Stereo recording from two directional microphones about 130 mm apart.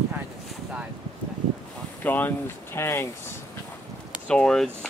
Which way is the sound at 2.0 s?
15° left (ahead or behind).